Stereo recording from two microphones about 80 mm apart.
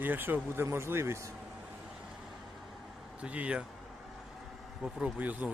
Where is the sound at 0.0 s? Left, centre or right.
Right.